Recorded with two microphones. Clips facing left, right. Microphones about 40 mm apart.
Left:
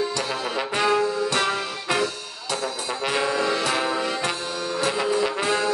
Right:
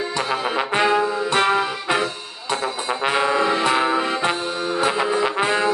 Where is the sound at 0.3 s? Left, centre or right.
Right.